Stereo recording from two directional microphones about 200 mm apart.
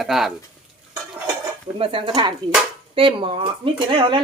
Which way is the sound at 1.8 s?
25° right (ahead or behind).